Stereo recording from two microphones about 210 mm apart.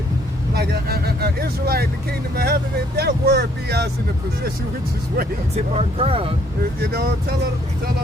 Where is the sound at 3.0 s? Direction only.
50° right (ahead or behind).